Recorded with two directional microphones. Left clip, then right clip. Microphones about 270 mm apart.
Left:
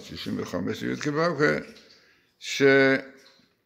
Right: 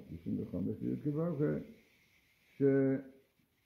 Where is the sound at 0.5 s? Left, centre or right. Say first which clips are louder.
Left 12 dB; centre.